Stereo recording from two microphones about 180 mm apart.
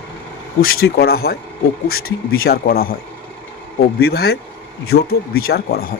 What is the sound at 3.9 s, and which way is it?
Speech, 65° left (ahead or behind).